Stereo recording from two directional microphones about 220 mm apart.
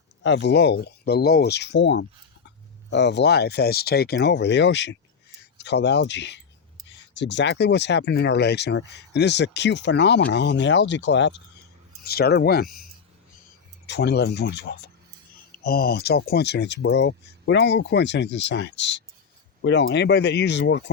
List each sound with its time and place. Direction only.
0.2 s speech: 55° left (ahead or behind)
13.8 s speech: 50° left (ahead or behind)